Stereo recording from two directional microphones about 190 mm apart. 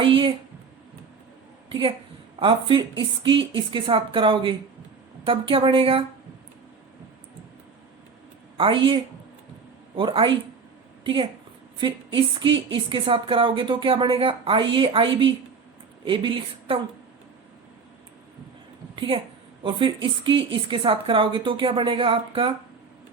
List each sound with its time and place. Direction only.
0.0 s a sound: 25° right (ahead or behind)
2.4 s a woman's voice: 25° right (ahead or behind)
8.5 s a woman's voice: 25° right (ahead or behind)
18.9 s a woman's voice: 25° right (ahead or behind)